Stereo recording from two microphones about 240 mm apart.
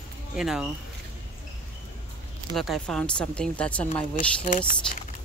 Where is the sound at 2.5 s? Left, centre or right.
Centre.